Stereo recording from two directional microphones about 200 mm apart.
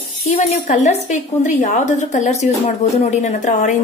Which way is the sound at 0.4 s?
35° left (ahead or behind).